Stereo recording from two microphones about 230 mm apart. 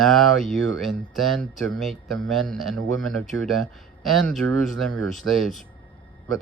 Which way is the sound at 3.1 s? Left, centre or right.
Centre.